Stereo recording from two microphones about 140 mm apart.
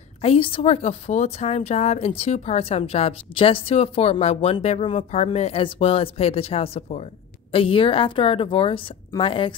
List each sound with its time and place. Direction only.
0.2 s a woman's voice: 40° left (ahead or behind)